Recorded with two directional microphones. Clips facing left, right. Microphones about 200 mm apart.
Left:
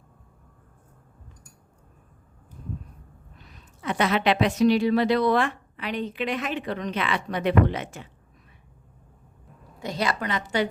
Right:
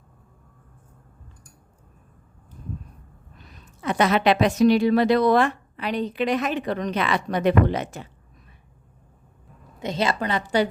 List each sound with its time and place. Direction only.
3.8 s a woman's voice: 40° right (ahead or behind)
9.8 s a woman's voice: 25° right (ahead or behind)